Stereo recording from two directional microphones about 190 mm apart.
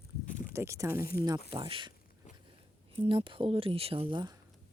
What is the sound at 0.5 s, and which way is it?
Speech, 15° right (ahead or behind).